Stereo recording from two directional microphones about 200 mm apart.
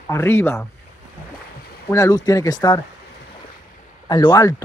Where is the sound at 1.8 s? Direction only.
15° left (ahead or behind).